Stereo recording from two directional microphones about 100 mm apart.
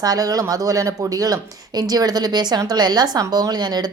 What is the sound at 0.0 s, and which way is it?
A woman's voice, 40° right (ahead or behind).